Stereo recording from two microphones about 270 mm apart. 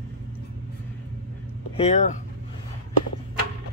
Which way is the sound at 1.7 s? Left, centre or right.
Left.